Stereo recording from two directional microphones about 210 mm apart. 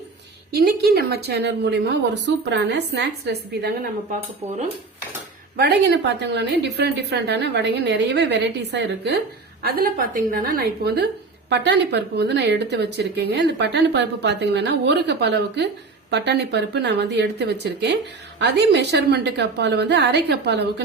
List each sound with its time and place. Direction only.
0.5 s speech: 50° right (ahead or behind)
5.5 s a woman's voice: 50° right (ahead or behind)
9.6 s speech: 45° right (ahead or behind)